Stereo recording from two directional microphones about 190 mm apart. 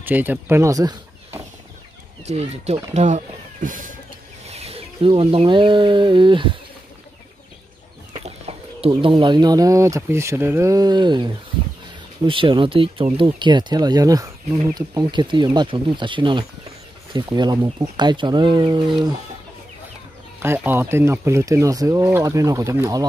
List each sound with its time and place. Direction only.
0.0 s speech: 10° right (ahead or behind)
2.2 s speech: 35° right (ahead or behind)
4.5 s speech: 35° right (ahead or behind)
8.1 s speech: 30° right (ahead or behind)
12.3 s speech: 25° right (ahead or behind)
20.3 s speech: 10° right (ahead or behind)